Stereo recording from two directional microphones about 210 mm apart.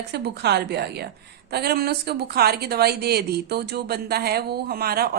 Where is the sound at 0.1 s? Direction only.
50° right (ahead or behind).